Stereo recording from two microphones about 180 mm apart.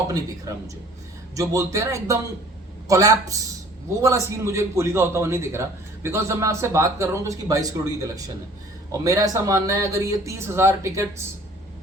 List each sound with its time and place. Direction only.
1.4 s a man's voice: 15° right (ahead or behind)